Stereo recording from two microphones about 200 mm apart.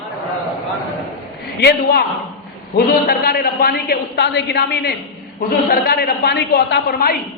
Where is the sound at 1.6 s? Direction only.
50° left (ahead or behind).